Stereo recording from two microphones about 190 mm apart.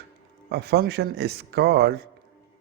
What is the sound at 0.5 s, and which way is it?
Speech, 55° right (ahead or behind).